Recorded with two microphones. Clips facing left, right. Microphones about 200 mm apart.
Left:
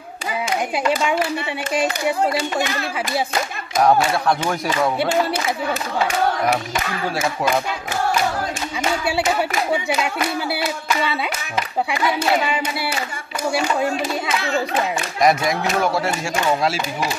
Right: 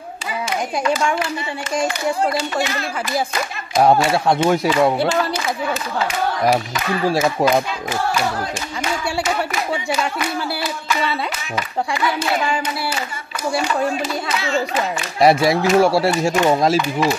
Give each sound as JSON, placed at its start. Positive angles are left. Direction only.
{"t": 3.8, "sound": "speech", "side_deg": -25}
{"t": 7.1, "sound": "speech", "side_deg": -35}
{"t": 12.4, "sound": "speech", "side_deg": 5}
{"t": 15.1, "sound": "speech", "side_deg": -30}